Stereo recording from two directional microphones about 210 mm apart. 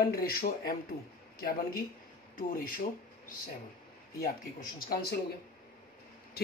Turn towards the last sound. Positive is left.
turn(degrees=45)  # may be behind; listen again after turning